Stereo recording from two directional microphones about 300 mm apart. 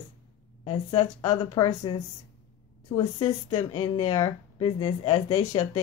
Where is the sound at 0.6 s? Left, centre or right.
Centre.